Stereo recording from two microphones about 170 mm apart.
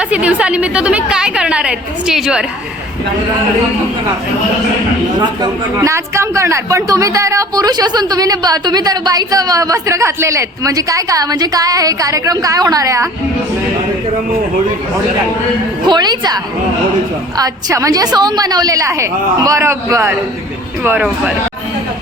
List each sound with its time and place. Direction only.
0.0 s a woman's voice: 5° right (ahead or behind)
5.4 s speech: 15° right (ahead or behind)
15.9 s a woman's voice: 25° right (ahead or behind); by 21.3 s 10° right (ahead or behind)